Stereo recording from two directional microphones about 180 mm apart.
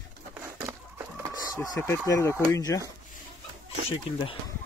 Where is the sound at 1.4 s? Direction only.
15° left (ahead or behind).